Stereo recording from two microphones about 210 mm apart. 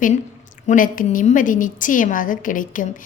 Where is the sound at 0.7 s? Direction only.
40° left (ahead or behind).